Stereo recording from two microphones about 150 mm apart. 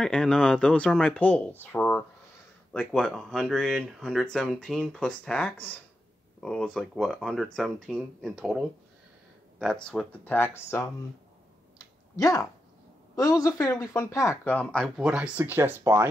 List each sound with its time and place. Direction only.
0.0 s speech: 5° left (ahead or behind)
1.6 s a sound: 15° left (ahead or behind)
2.7 s speech: 5° left (ahead or behind)
12.2 s speech: 25° left (ahead or behind)
15.0 s speech: 5° right (ahead or behind)